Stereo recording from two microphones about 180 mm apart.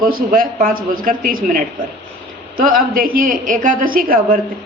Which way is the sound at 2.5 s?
50° right (ahead or behind).